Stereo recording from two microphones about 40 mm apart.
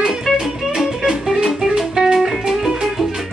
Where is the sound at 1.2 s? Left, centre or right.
Centre.